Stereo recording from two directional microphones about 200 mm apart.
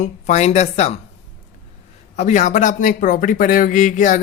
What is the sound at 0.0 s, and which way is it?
Speech, 35° left (ahead or behind).